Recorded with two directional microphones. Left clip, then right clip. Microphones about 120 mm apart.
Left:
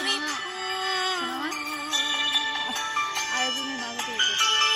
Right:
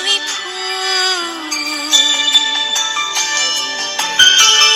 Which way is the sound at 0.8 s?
55° right (ahead or behind).